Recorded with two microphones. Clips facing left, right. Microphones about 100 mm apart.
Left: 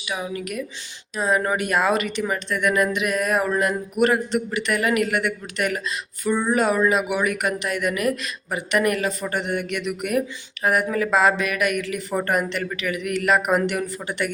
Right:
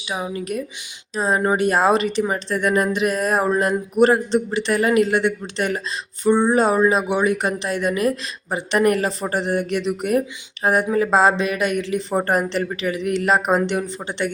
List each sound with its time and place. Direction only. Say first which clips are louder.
0.0 s speech: right 2 dB; 25° right (ahead or behind)